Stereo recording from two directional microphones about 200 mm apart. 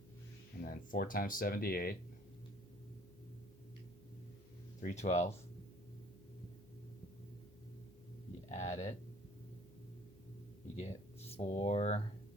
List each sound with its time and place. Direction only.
0.6 s speech: 45° left (ahead or behind)
4.8 s speech: 35° left (ahead or behind)
8.4 s speech: 35° left (ahead or behind)
10.8 s speech: 30° left (ahead or behind)